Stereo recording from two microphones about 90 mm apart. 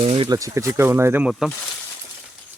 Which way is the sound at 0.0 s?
90° right.